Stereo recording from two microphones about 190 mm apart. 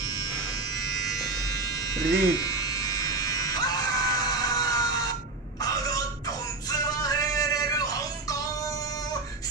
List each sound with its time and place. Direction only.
2.1 s electric shaver: 20° left (ahead or behind)
5.6 s a sound: 20° left (ahead or behind)
6.7 s music: 20° left (ahead or behind)